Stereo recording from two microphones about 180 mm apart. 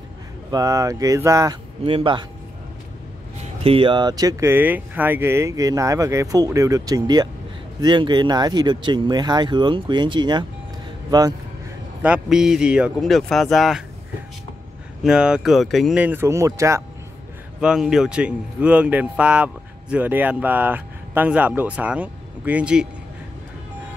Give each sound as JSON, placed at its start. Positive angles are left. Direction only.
{"t": 0.5, "sound": "speech", "side_deg": -20}
{"t": 3.6, "sound": "speech", "side_deg": -30}
{"t": 12.0, "sound": "speech", "side_deg": -5}
{"t": 15.0, "sound": "speech", "side_deg": -5}
{"t": 17.6, "sound": "speech", "side_deg": -5}